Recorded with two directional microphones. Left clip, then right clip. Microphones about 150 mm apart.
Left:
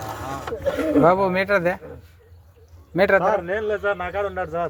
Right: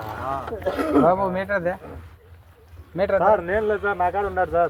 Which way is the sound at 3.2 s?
25° left (ahead or behind).